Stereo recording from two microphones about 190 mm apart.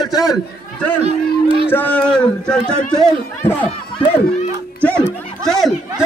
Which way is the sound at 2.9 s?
20° left (ahead or behind).